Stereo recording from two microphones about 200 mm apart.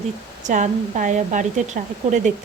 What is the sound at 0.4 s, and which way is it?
A woman's voice, 40° right (ahead or behind).